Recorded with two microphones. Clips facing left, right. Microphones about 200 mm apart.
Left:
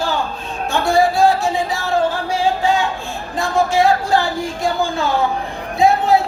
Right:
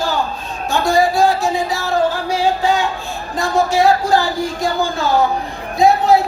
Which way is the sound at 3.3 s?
40° right (ahead or behind).